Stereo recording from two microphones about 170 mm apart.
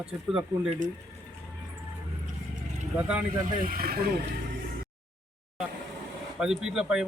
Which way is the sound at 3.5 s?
55° right (ahead or behind).